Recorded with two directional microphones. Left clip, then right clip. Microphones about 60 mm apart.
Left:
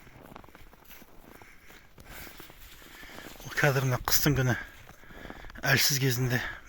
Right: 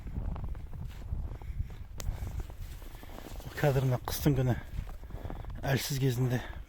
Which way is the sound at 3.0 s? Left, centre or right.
Centre.